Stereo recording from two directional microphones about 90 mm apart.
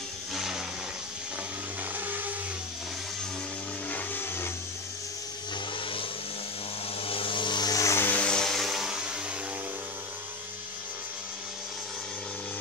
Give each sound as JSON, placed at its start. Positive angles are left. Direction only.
{"t": 0.3, "sound": "a sound", "side_deg": -5}
{"t": 2.0, "sound": "vehicle", "side_deg": -20}
{"t": 3.9, "sound": "vehicle", "side_deg": 25}
{"t": 7.0, "sound": "vehicle", "side_deg": 90}
{"t": 7.7, "sound": "vehicle", "side_deg": 35}
{"t": 8.0, "sound": "vehicle", "side_deg": 15}